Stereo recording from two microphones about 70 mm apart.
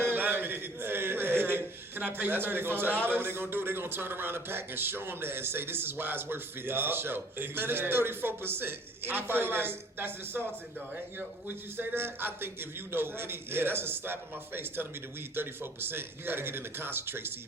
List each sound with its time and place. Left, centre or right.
0.0 s a sound: right
2.0 s a man's voice: right
11.4 s a man's voice: right